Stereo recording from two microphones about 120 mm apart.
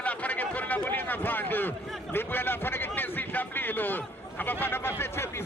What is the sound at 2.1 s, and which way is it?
A man's voice, 15° left (ahead or behind).